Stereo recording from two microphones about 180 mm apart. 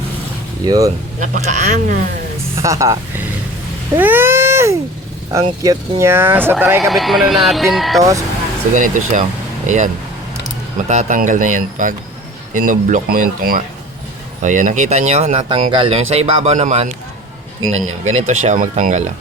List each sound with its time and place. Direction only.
0.6 s speech: 20° right (ahead or behind)
1.2 s speech: 40° right (ahead or behind)
2.6 s speech: 15° right (ahead or behind)
3.9 s cat: 10° right (ahead or behind)
5.6 s speech: 15° right (ahead or behind)
6.9 s a man's voice: centre (ahead or behind)
8.7 s speech: 45° right (ahead or behind)